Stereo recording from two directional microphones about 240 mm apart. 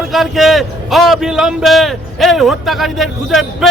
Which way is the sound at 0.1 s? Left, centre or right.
Centre.